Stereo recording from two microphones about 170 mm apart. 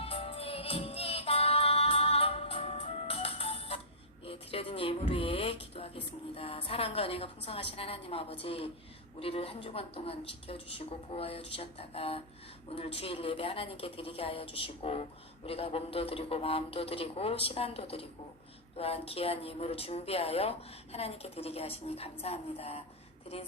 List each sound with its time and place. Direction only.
0.0 s music: 35° left (ahead or behind)
8.0 s speech: 35° left (ahead or behind)